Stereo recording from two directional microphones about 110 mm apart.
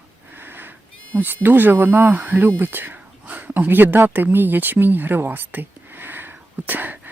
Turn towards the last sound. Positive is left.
turn(degrees=-15)  # may be behind; listen again after turning